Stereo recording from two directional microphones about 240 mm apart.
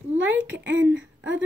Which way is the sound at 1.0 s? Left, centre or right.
Right.